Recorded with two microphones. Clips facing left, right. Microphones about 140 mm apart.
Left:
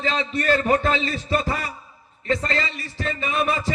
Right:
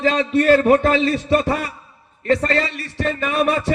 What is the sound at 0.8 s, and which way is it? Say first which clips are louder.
Speech: right 6 dB; 60° right (ahead or behind).